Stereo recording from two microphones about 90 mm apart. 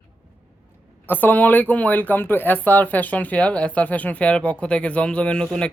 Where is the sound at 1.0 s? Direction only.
20° left (ahead or behind).